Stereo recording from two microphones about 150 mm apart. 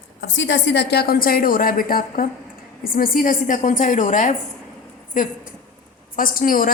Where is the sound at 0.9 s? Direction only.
90° left.